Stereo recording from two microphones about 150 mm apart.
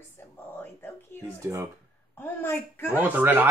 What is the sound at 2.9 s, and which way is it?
Speech, 10° right (ahead or behind).